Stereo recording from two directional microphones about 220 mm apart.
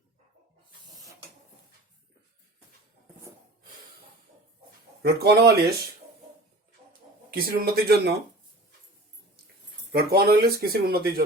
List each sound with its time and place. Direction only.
5.0 s speech: 50° right (ahead or behind)
7.3 s speech: 40° right (ahead or behind)
9.9 s speech: 45° right (ahead or behind)